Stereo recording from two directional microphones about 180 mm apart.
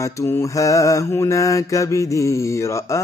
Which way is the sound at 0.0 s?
15° left (ahead or behind).